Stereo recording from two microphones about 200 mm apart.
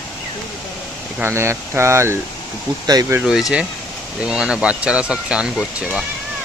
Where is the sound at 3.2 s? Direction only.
Centre (ahead or behind).